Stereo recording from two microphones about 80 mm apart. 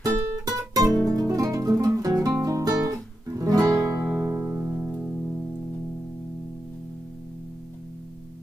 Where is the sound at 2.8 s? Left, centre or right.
Right.